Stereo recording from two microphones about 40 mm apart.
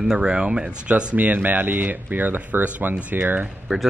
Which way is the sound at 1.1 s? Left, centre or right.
Right.